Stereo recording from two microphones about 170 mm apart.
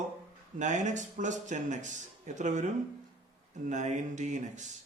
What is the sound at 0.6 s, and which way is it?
Speech, 45° right (ahead or behind).